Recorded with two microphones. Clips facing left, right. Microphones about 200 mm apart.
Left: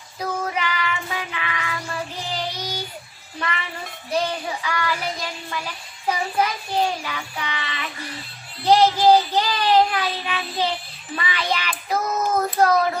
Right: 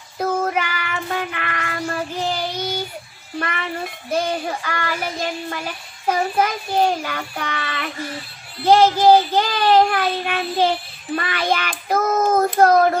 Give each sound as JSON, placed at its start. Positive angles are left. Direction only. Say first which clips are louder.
{"t": 0.2, "sound": "child singing", "louder": "right 5 dB", "side_deg": -50}
{"t": 3.3, "sound": "a sound", "louder": "right 3 dB", "side_deg": -50}
{"t": 4.1, "sound": "child singing", "louder": "right 2 dB", "side_deg": -50}